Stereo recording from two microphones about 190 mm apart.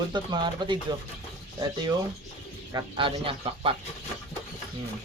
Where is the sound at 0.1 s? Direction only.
25° right (ahead or behind).